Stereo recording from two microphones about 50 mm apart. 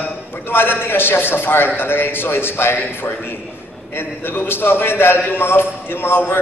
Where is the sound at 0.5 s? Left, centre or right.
Left.